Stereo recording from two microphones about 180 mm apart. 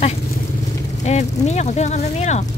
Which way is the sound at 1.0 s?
40° left (ahead or behind).